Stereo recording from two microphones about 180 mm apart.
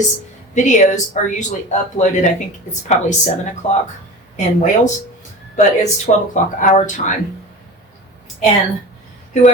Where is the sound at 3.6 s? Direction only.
40° left (ahead or behind).